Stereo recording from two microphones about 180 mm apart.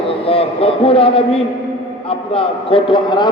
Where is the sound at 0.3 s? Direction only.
30° left (ahead or behind).